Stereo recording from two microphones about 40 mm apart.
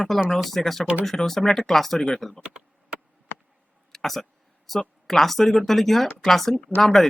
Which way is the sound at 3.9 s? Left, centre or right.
Centre.